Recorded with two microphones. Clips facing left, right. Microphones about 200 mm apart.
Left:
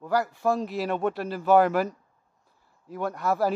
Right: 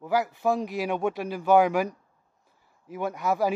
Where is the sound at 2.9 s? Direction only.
Centre (ahead or behind).